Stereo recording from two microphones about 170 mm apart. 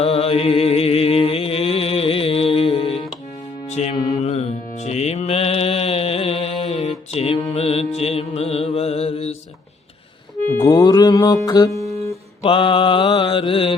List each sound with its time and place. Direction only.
0.0 s music: 35° left (ahead or behind)
4.2 s mantra: 40° left (ahead or behind)
7.5 s music: 35° left (ahead or behind)
10.5 s music: 20° left (ahead or behind)
12.4 s mantra: 30° left (ahead or behind)